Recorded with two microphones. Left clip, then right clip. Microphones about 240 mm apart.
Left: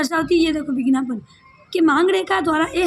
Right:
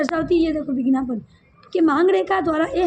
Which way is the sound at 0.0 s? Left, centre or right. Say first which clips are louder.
Left 1 dB; left.